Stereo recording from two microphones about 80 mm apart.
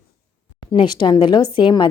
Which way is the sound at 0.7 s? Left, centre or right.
Left.